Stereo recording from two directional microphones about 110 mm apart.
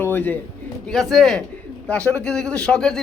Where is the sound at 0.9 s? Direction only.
Centre (ahead or behind).